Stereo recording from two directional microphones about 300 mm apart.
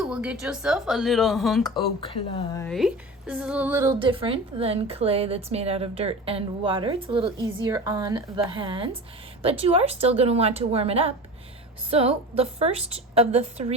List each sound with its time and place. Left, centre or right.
0.0 s speech: centre
1.6 s speech: centre
2.6 s a woman's voice: centre; by 13.7 s right